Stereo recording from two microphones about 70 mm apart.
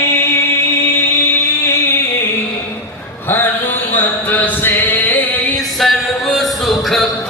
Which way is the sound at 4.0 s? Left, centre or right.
Left.